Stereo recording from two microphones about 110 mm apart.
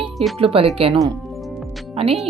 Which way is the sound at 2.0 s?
60° right (ahead or behind).